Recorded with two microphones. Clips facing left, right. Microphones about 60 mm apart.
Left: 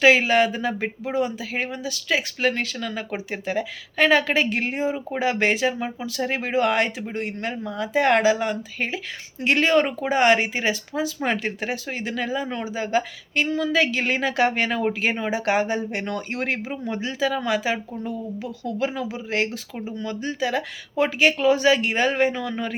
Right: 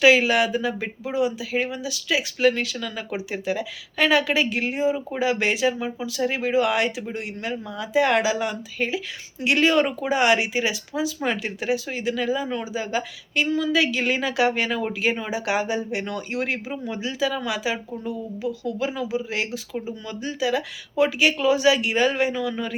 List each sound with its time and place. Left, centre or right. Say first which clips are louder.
0.0 s speech: even; left